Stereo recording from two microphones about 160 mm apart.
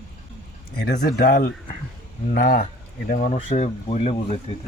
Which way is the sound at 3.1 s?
50° left (ahead or behind).